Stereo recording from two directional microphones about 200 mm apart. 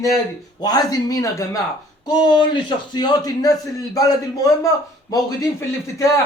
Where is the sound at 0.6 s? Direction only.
20° left (ahead or behind).